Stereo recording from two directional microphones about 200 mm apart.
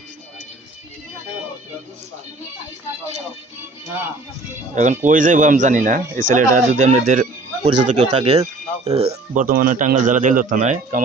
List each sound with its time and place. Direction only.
4.7 s speech: 35° right (ahead or behind)